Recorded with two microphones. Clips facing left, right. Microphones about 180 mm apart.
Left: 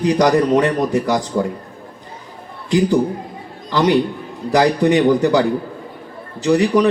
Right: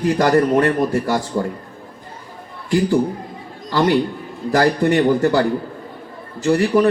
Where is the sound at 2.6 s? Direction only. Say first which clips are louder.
Left 1 dB; 20° left (ahead or behind).